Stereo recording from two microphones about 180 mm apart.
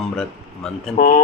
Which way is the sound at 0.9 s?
50° left (ahead or behind).